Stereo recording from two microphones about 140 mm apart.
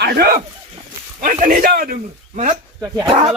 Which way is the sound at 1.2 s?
75° right (ahead or behind).